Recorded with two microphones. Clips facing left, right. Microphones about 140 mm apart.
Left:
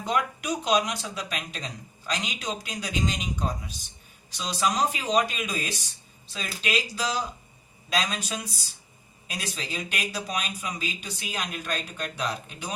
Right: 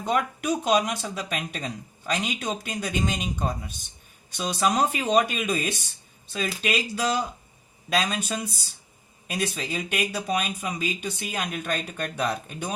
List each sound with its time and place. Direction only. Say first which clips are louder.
0.0 s speech: right 2 dB; 55° right (ahead or behind)